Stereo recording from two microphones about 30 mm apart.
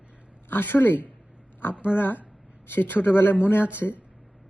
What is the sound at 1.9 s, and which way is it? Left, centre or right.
Speech, right.